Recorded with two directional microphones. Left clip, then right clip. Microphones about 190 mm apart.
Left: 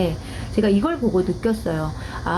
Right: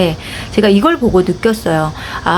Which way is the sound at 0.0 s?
25° right (ahead or behind).